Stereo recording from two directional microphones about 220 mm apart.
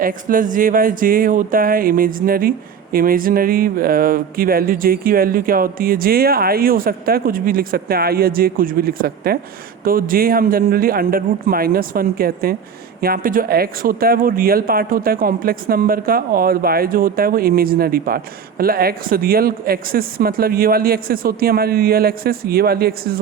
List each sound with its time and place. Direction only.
0.0 s speech: 40° right (ahead or behind)